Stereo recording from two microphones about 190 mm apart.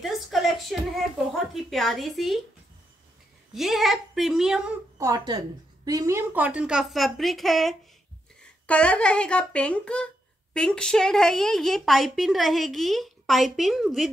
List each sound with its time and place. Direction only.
0.0 s a sound: centre (ahead or behind)
1.5 s speech: centre (ahead or behind)
3.5 s speech: centre (ahead or behind)
4.9 s a woman's voice: 20° right (ahead or behind); by 14.1 s centre (ahead or behind)